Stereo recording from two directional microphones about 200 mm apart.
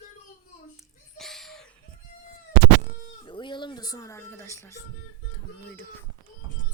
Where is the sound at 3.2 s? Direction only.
25° left (ahead or behind).